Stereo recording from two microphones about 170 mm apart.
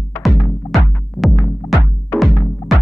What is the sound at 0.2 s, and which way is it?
Music, centre (ahead or behind).